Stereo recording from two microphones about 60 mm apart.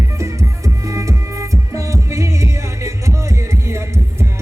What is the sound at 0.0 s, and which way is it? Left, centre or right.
Music, right.